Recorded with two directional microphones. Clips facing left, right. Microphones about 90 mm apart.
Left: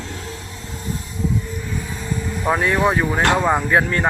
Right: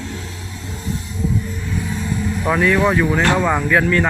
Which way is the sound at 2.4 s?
30° left (ahead or behind).